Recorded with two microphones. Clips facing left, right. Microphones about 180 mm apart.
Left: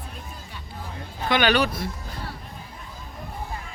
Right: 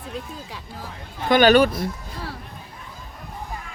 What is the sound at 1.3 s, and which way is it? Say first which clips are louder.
Speech: right 7 dB; 45° right (ahead or behind).